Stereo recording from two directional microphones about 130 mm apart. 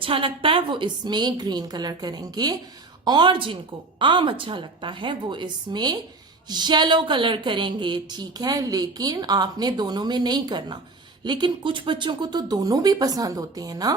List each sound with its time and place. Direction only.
0.0 s a woman's voice: 45° right (ahead or behind)